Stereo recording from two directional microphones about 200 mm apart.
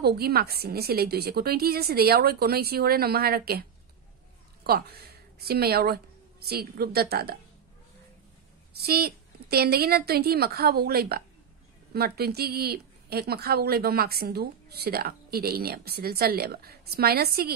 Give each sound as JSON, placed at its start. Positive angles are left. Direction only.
{"t": 0.0, "sound": "a woman's voice", "side_deg": -50}
{"t": 4.6, "sound": "a woman's voice", "side_deg": -50}
{"t": 8.7, "sound": "a woman's voice", "side_deg": -50}